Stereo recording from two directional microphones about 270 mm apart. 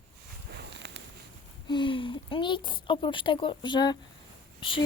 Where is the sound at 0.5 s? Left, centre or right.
Right.